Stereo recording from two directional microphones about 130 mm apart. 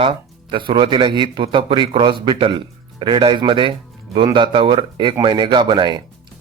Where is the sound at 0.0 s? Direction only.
40° right (ahead or behind).